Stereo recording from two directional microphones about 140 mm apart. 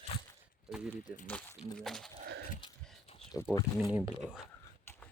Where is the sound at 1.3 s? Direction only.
5° left (ahead or behind).